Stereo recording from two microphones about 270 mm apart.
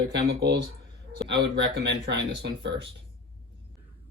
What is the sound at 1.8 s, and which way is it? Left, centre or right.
Speech, right.